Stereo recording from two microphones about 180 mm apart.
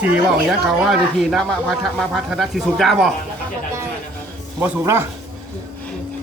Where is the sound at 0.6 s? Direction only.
Centre (ahead or behind).